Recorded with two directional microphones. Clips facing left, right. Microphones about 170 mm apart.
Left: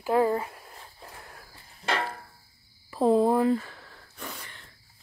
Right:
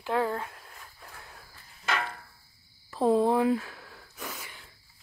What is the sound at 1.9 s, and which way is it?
Music, 30° left (ahead or behind).